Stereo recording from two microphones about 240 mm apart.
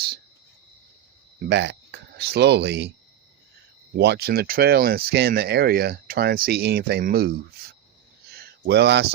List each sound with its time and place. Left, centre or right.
1.4 s speech: right
3.9 s speech: right
8.3 s a sound: right